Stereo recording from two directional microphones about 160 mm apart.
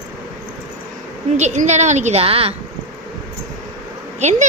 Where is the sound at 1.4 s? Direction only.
45° right (ahead or behind).